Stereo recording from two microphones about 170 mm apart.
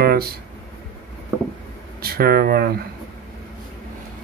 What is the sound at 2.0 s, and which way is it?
Speech, 65° right (ahead or behind).